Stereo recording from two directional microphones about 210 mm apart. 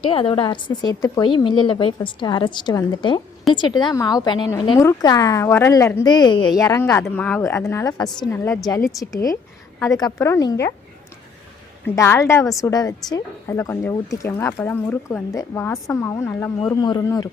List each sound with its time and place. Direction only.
0.0 s a woman's voice: 25° left (ahead or behind)
11.9 s a woman's voice: 15° left (ahead or behind)